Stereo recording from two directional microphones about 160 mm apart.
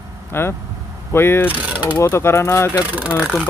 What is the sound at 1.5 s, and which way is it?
Speech, 10° right (ahead or behind).